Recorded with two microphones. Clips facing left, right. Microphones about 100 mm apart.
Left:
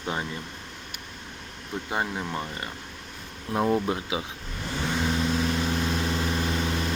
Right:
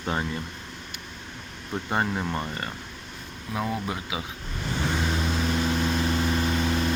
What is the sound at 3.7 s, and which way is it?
Speech, 25° left (ahead or behind).